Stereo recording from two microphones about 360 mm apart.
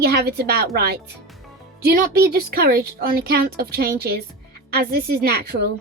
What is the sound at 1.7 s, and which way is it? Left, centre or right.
Speech, right.